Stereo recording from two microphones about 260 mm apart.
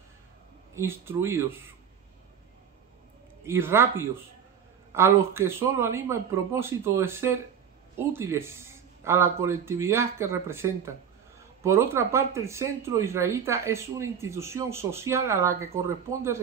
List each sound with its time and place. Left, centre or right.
0.7 s speech: centre
3.4 s speech: centre